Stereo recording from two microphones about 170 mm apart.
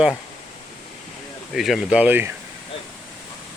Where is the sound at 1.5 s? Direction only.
Centre (ahead or behind).